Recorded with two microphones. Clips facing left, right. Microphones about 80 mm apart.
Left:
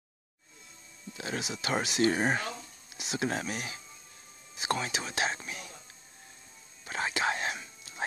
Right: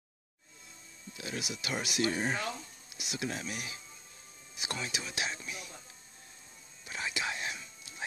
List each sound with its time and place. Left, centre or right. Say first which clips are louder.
1.1 s speech: left 4 dB; left
2.0 s speech: left 5 dB; left
3.0 s speech: left 5 dB; left
3.3 s speech: left 4 dB; left
6.9 s whispering: left 6 dB; left